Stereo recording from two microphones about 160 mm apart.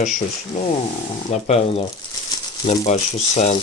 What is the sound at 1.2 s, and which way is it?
Speech, 45° left (ahead or behind).